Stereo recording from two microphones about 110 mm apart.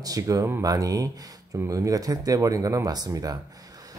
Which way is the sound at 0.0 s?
30° right (ahead or behind).